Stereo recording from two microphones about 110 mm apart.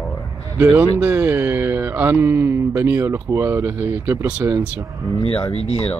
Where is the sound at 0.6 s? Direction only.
20° right (ahead or behind).